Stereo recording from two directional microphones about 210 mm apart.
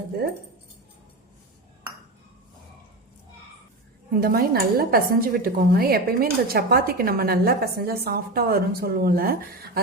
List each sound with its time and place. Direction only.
4.1 s a woman's voice: 45° right (ahead or behind)